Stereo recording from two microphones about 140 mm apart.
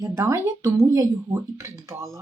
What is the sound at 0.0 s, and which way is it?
Speech, 20° right (ahead or behind).